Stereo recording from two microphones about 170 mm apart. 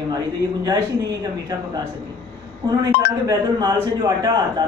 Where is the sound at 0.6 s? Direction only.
25° right (ahead or behind).